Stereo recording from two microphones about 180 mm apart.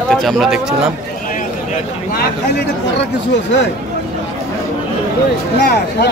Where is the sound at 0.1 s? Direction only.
Centre (ahead or behind).